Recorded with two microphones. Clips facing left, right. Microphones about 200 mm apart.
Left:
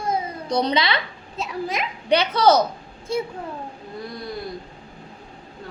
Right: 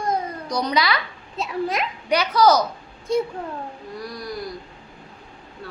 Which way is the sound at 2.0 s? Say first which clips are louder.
Left 1 dB; 25° left (ahead or behind).